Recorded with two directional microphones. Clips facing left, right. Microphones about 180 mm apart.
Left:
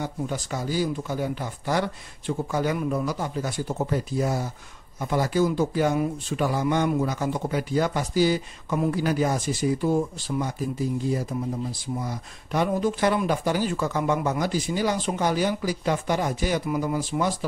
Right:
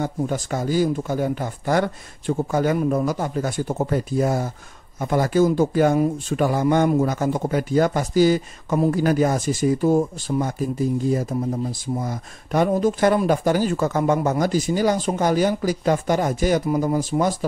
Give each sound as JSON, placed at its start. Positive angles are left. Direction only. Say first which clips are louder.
{"t": 0.0, "sound": "speech", "louder": "right 5 dB", "side_deg": -50}